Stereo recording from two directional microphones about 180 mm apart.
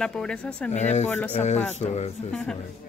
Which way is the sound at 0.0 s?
5° left (ahead or behind).